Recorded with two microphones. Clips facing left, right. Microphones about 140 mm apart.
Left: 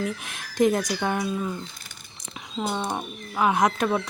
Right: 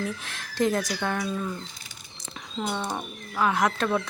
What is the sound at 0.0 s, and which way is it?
Speech, 15° left (ahead or behind).